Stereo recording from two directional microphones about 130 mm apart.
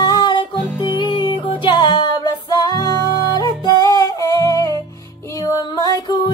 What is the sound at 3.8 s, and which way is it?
Music, 25° left (ahead or behind).